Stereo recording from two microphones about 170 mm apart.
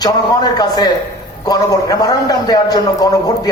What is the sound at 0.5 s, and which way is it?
A man's voice, 25° left (ahead or behind).